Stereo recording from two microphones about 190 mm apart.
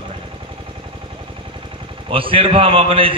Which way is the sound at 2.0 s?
30° right (ahead or behind).